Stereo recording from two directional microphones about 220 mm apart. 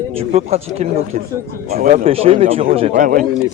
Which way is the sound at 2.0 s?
25° right (ahead or behind).